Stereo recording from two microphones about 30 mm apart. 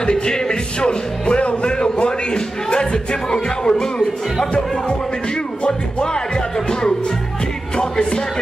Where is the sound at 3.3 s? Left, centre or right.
Left.